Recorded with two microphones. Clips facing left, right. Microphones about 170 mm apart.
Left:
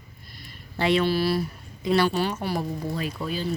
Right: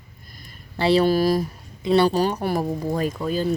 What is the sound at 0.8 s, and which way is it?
Speech, 40° right (ahead or behind).